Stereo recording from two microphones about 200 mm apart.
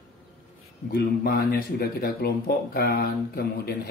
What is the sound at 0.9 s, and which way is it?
Speech, 55° left (ahead or behind).